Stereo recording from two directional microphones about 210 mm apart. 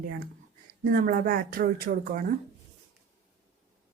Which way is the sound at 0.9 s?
40° right (ahead or behind).